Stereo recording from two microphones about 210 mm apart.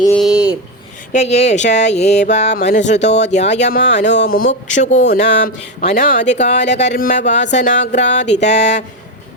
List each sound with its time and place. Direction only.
0.2 s a sound: 5° right (ahead or behind)
1.1 s speech: 30° left (ahead or behind)
4.0 s speech: 55° left (ahead or behind)
4.4 s speech: 35° left (ahead or behind)